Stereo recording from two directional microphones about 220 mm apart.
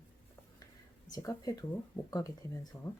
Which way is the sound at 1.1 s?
15° left (ahead or behind).